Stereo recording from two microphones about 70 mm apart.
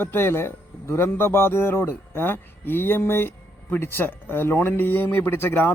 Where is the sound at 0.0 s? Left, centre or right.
Left.